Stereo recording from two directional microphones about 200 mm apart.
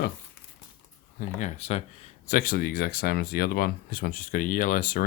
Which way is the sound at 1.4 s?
35° left (ahead or behind).